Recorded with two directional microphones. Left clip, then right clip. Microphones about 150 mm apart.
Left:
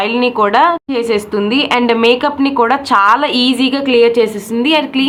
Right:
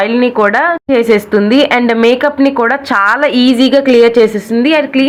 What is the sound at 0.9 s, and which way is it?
A woman's voice, 35° right (ahead or behind).